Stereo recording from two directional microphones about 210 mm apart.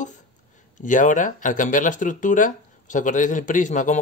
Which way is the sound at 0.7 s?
35° left (ahead or behind).